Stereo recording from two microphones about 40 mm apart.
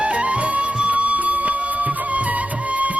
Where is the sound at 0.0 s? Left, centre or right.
Right.